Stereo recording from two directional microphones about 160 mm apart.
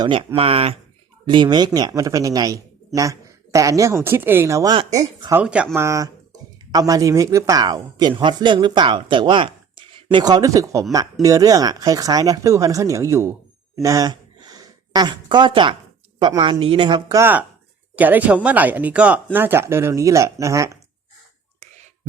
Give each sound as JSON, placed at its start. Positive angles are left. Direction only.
{"t": 0.0, "sound": "a man's voice", "side_deg": -30}
{"t": 5.3, "sound": "a man's voice", "side_deg": -10}
{"t": 13.8, "sound": "a sound", "side_deg": -20}
{"t": 16.1, "sound": "a man's voice", "side_deg": -30}
{"t": 17.2, "sound": "speech", "side_deg": -15}